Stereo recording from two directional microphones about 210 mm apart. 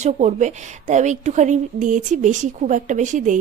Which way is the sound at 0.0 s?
35° right (ahead or behind).